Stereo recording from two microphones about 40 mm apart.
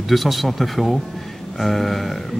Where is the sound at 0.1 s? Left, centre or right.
Centre.